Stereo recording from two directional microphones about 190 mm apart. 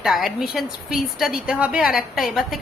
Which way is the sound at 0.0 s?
Centre (ahead or behind).